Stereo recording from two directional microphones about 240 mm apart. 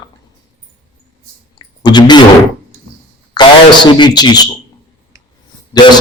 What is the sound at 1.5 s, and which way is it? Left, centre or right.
Clicking, centre.